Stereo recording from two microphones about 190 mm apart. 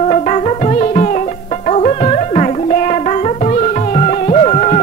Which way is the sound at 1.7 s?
35° left (ahead or behind).